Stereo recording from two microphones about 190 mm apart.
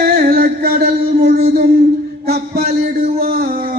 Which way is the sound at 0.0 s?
55° right (ahead or behind).